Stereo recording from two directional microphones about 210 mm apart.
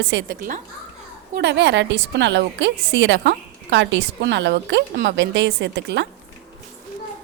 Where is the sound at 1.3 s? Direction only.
55° right (ahead or behind).